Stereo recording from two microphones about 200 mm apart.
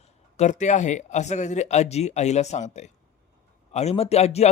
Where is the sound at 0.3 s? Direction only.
35° left (ahead or behind).